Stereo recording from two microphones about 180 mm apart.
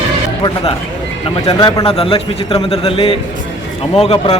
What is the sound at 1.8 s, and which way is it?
A man's voice, 30° left (ahead or behind).